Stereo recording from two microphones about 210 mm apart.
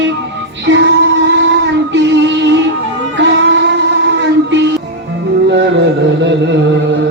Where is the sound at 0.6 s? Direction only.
55° right (ahead or behind).